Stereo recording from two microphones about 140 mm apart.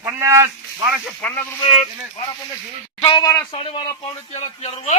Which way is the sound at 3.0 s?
35° left (ahead or behind).